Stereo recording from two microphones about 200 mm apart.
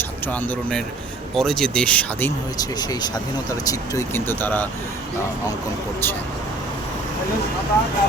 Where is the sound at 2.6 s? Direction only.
20° left (ahead or behind).